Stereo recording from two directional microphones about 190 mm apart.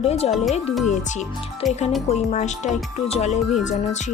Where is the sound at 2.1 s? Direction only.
35° left (ahead or behind).